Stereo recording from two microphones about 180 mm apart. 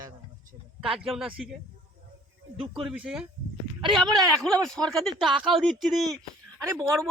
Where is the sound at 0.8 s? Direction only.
Centre (ahead or behind).